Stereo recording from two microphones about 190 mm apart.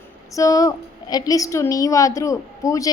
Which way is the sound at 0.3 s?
20° left (ahead or behind).